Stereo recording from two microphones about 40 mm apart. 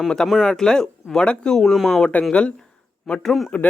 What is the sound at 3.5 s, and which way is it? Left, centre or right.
Speech, left.